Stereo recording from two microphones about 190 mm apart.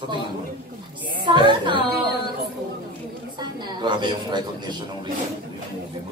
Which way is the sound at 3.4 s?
25° right (ahead or behind).